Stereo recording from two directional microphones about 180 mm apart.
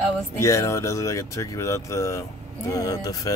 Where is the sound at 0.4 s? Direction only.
15° left (ahead or behind).